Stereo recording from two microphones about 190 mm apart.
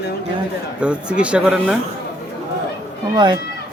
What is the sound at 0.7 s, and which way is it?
Speech, 5° right (ahead or behind).